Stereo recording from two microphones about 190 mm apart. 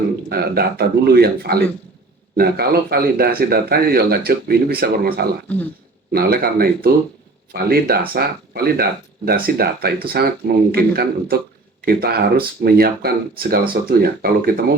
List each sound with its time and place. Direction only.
0.3 s speech: 55° right (ahead or behind)